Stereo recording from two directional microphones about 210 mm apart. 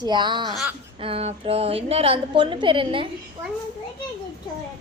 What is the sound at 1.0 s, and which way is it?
A woman's voice, 25° right (ahead or behind).